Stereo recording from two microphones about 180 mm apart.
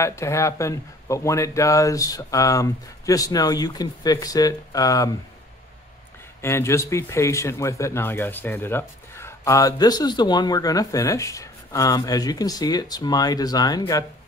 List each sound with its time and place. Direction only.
0.0 s speech: 15° left (ahead or behind)
6.4 s speech: 15° left (ahead or behind)